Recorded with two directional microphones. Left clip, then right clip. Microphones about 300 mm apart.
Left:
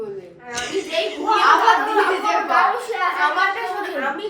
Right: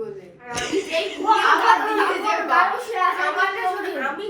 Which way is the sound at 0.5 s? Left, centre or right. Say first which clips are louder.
Even; centre.